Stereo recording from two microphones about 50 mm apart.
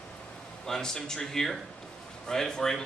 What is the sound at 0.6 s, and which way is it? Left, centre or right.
A man's voice, centre.